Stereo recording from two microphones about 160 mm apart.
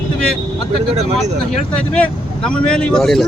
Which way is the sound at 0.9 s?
45° right (ahead or behind).